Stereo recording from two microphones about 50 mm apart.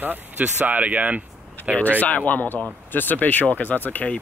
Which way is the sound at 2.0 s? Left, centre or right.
Left.